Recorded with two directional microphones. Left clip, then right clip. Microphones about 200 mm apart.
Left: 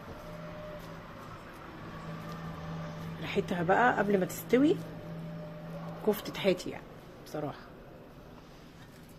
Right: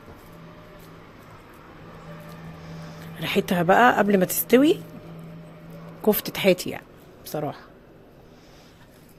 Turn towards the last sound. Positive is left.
turn(degrees=-45)  # may be behind; listen again after turning